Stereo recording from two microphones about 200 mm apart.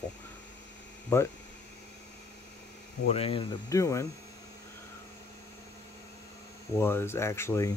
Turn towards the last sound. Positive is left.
turn(degrees=15)  # may be behind; listen again after turning